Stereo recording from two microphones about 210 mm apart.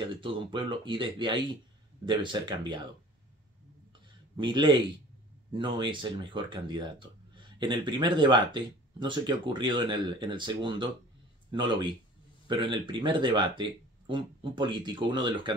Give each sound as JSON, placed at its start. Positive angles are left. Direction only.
{"t": 0.1, "sound": "speech", "side_deg": -25}
{"t": 4.4, "sound": "speech", "side_deg": -20}